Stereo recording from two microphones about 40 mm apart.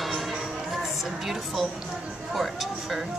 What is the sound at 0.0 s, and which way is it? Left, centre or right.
Music, centre.